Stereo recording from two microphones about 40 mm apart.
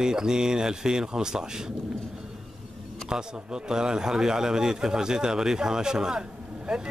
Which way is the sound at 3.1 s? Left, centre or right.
Centre.